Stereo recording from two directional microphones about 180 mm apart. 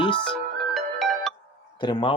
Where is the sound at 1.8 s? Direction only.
25° left (ahead or behind).